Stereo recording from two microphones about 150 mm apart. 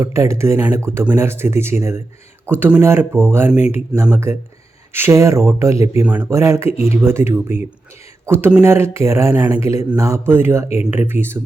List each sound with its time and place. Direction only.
0.0 s speech: 20° right (ahead or behind)
4.9 s speech: 20° right (ahead or behind)